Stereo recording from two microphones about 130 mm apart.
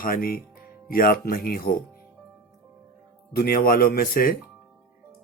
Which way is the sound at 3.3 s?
90° left.